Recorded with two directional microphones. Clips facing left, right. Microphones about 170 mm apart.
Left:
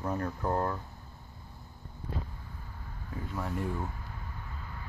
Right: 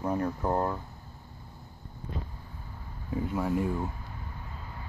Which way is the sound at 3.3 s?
10° right (ahead or behind).